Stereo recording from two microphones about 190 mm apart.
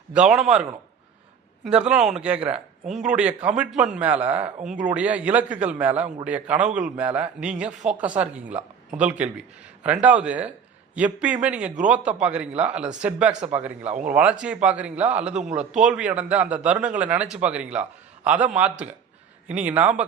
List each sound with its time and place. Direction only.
0.1 s a man's voice: 5° right (ahead or behind)
1.6 s a man's voice: 5° right (ahead or behind)
15.4 s a man's voice: 35° right (ahead or behind)
15.9 s a man's voice: 5° right (ahead or behind)